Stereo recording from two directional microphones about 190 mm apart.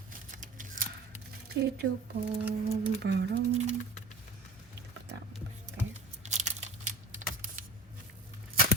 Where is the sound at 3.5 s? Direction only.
35° right (ahead or behind).